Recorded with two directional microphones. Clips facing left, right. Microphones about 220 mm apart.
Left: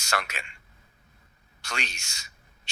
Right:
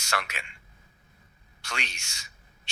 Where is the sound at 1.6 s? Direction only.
40° left (ahead or behind).